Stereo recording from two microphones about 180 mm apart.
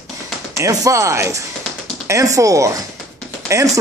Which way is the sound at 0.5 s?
15° right (ahead or behind).